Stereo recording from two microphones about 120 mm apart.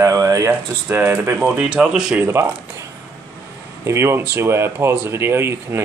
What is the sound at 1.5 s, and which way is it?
Speech, 5° right (ahead or behind).